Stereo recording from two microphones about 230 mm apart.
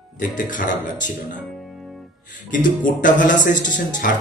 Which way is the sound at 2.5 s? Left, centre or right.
Left.